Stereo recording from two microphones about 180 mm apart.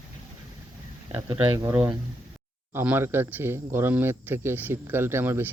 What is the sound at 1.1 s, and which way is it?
Speech, 15° right (ahead or behind).